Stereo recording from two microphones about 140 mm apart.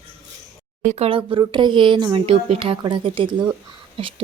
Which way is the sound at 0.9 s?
50° right (ahead or behind).